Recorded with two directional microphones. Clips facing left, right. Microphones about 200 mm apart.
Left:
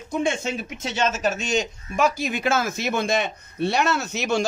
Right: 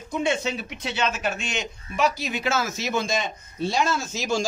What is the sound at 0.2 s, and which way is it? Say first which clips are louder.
Speech: even; 50° left (ahead or behind).